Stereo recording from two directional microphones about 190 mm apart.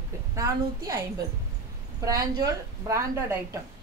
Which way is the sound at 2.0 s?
20° right (ahead or behind).